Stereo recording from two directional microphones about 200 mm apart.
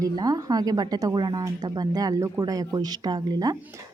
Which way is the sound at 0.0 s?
15° right (ahead or behind).